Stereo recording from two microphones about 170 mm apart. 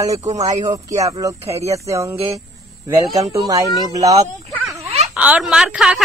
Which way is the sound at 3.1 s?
20° right (ahead or behind).